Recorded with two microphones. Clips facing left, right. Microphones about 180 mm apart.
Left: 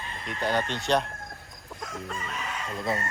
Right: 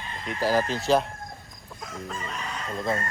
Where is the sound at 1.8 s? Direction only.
Centre (ahead or behind).